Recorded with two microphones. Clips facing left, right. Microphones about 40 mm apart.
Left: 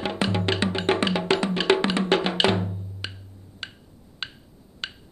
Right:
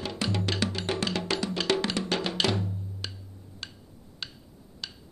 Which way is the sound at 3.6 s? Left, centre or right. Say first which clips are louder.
Left 6 dB; left.